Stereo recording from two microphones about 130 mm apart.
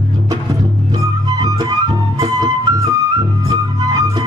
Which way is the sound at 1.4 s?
30° right (ahead or behind).